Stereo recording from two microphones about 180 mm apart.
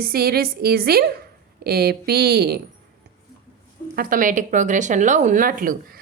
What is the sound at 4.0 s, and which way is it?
Speech, 50° right (ahead or behind).